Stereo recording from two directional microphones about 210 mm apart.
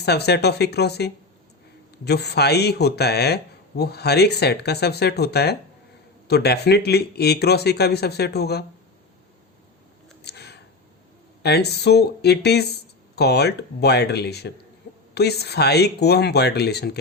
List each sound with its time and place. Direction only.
0.0 s speech: 50° left (ahead or behind)
10.2 s a sound: 50° left (ahead or behind)
11.4 s speech: 50° left (ahead or behind)